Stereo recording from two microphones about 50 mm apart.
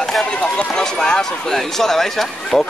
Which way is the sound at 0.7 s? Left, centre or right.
Centre.